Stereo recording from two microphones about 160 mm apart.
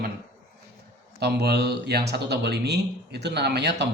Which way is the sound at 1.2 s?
90° right.